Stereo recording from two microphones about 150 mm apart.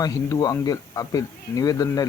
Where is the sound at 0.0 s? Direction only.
25° left (ahead or behind).